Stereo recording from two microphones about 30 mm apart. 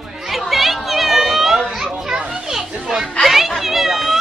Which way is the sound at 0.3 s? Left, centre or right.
Centre.